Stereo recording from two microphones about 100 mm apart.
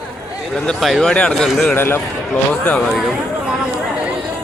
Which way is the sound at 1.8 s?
20° left (ahead or behind).